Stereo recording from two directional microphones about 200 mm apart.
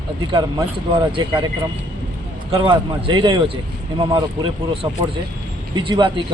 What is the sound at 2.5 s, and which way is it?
A man's voice, 25° right (ahead or behind).